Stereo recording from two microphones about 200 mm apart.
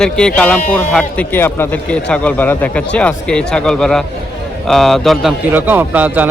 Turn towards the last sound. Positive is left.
turn(degrees=-10)  # may be behind; listen again after turning